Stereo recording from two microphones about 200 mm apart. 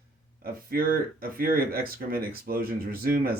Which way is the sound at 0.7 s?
50° right (ahead or behind).